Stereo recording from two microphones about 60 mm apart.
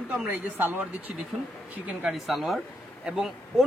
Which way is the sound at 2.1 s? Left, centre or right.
Centre.